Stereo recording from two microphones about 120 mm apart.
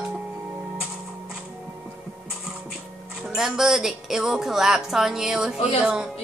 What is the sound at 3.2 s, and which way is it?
Speech, 5° right (ahead or behind).